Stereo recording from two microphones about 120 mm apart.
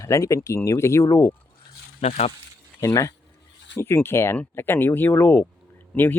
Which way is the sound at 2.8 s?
25° left (ahead or behind).